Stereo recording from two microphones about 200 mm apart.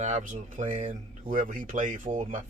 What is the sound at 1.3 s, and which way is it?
Speech, 40° right (ahead or behind).